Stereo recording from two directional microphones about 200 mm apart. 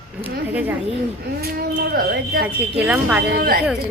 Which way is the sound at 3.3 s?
50° right (ahead or behind).